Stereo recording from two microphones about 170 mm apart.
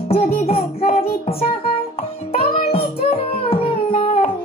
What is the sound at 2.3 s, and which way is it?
Music, 60° left (ahead or behind).